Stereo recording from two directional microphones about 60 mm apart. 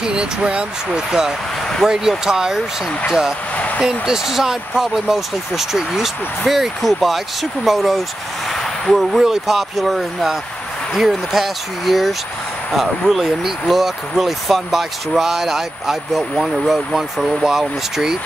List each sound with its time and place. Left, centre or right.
0.0 s speech: centre
3.5 s speech: left
3.8 s speech: centre